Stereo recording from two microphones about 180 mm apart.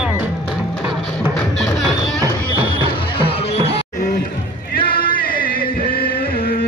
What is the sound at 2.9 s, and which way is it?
Music, 30° left (ahead or behind).